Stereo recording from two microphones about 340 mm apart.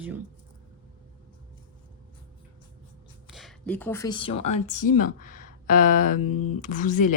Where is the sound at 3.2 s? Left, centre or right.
Centre; by 7.1 s left.